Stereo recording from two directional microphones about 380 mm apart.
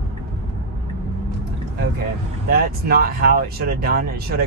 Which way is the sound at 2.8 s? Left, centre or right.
Right.